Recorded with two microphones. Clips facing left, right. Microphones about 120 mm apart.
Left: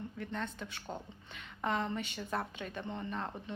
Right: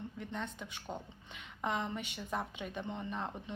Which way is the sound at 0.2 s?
15° right (ahead or behind).